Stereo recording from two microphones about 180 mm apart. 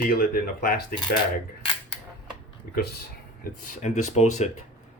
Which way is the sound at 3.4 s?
40° left (ahead or behind).